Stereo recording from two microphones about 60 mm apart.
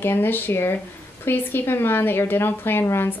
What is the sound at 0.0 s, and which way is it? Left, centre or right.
Speech, left.